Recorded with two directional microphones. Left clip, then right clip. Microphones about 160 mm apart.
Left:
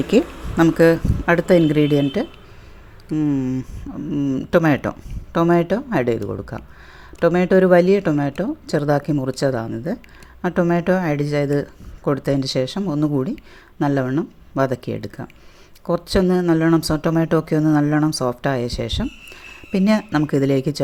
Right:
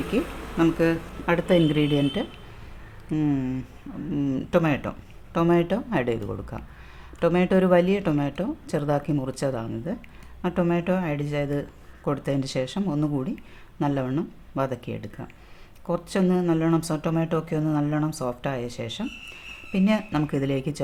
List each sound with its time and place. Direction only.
0.1 s speech: 45° left (ahead or behind)
1.2 s speech: 30° left (ahead or behind)
3.1 s speech: 10° left (ahead or behind)
4.5 s speech: 35° left (ahead or behind)